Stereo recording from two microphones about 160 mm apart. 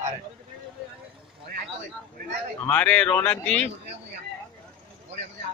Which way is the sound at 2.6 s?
10° left (ahead or behind).